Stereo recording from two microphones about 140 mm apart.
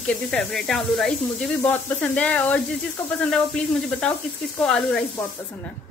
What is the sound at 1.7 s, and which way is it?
A woman's voice, 10° left (ahead or behind).